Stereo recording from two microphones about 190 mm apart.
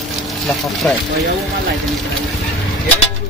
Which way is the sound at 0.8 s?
5° left (ahead or behind).